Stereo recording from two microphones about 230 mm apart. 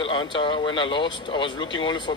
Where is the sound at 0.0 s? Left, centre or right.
Left.